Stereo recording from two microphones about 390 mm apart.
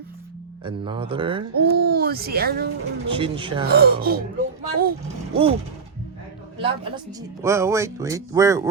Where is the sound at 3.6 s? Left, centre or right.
Right.